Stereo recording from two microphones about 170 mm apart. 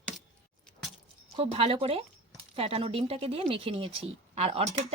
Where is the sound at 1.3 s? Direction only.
35° right (ahead or behind).